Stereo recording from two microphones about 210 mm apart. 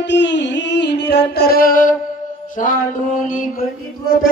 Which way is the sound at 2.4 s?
40° left (ahead or behind).